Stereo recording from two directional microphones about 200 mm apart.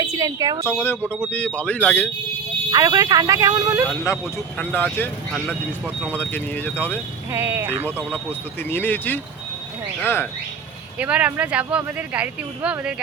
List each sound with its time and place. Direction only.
0.0 s speech: 15° right (ahead or behind)
0.6 s speech: 10° left (ahead or behind)
2.7 s speech: 20° right (ahead or behind)
4.0 s speech: 10° left (ahead or behind)
5.3 s speech: centre (ahead or behind)
6.1 s speech: 10° left (ahead or behind)
7.3 s speech: 10° right (ahead or behind)
7.9 s speech: 10° left (ahead or behind)
10.9 s speech: 5° right (ahead or behind)